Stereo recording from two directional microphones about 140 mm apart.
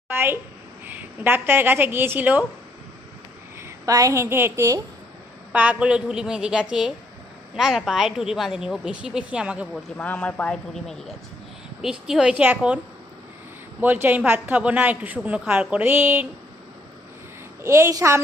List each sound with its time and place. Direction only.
0.1 s a woman's voice: 15° right (ahead or behind)
3.6 s a woman's voice: 25° right (ahead or behind)
5.5 s a woman's voice: 10° right (ahead or behind)
10.0 s a woman's voice: 10° left (ahead or behind); by 12.8 s 10° right (ahead or behind)
13.8 s a woman's voice: 15° right (ahead or behind)
17.6 s a woman's voice: 20° right (ahead or behind)